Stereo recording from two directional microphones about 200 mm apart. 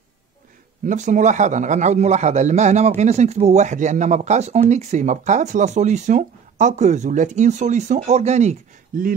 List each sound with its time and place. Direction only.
0.8 s a man's voice: 40° right (ahead or behind)